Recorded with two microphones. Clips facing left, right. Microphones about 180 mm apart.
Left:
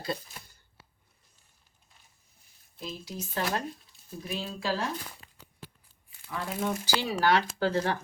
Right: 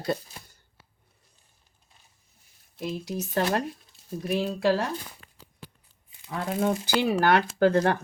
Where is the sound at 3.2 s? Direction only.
45° right (ahead or behind).